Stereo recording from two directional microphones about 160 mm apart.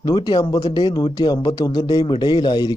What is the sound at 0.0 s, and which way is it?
Speech, 25° left (ahead or behind).